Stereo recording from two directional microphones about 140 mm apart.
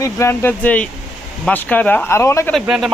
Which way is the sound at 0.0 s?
20° left (ahead or behind).